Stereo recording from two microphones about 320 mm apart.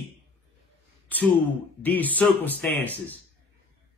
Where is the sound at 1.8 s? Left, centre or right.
Centre.